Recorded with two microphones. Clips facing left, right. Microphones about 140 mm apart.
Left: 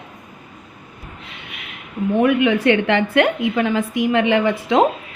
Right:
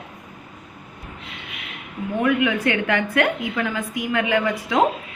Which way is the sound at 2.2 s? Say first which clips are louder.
Left 4 dB; 30° left (ahead or behind).